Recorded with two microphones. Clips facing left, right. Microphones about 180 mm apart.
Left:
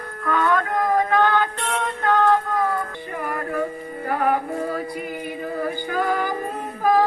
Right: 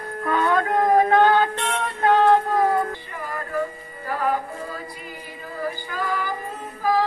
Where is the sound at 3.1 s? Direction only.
55° left (ahead or behind).